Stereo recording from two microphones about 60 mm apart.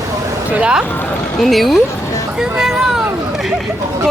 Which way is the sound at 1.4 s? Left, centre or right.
Centre.